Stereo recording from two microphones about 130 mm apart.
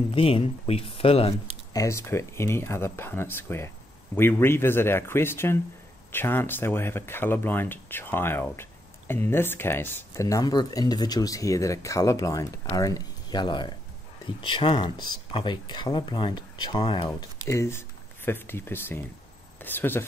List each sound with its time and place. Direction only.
0.1 s speech: 45° left (ahead or behind)
1.7 s speech: 25° left (ahead or behind)
17.5 s speech: 20° left (ahead or behind)